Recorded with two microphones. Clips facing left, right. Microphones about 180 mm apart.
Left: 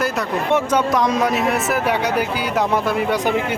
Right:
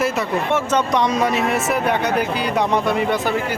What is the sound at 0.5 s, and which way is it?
Speech, 10° left (ahead or behind).